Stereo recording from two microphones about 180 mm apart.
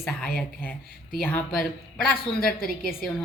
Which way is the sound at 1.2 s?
5° left (ahead or behind).